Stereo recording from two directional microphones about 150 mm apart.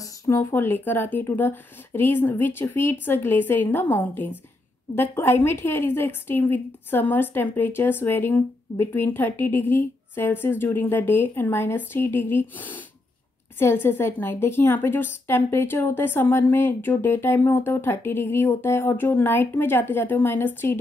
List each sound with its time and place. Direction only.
0.0 s a woman's voice: 20° left (ahead or behind)